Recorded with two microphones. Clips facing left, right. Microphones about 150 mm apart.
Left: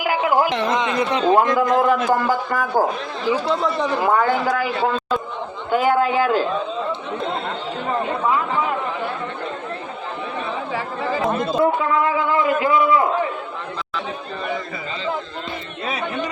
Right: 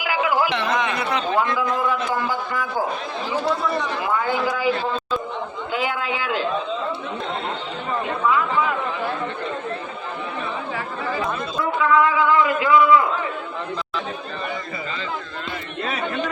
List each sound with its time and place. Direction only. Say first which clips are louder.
0.0 s a sound: left 3 dB; 50° left (ahead or behind)
0.7 s a man's voice: left 3 dB; 20° left (ahead or behind)
1.3 s a man's voice: left 7 dB; 45° left (ahead or behind)
3.6 s a man's voice: left 4 dB; 35° left (ahead or behind)
5.7 s a man's voice: left 9 dB; 45° left (ahead or behind)
11.6 s a sound: right 2 dB; 45° left (ahead or behind)